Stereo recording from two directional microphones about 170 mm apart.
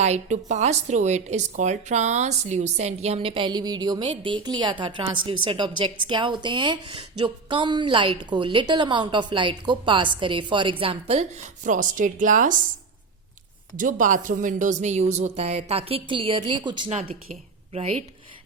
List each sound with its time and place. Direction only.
0.0 s a woman's voice: 40° right (ahead or behind)
13.7 s speech: 50° right (ahead or behind); by 16.9 s 25° right (ahead or behind)
16.9 s speech: 40° right (ahead or behind)